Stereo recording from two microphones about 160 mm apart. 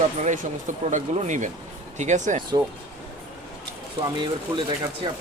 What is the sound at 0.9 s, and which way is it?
Speech, 50° right (ahead or behind).